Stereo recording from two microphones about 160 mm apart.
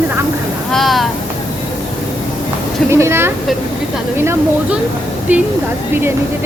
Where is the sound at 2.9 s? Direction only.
15° right (ahead or behind).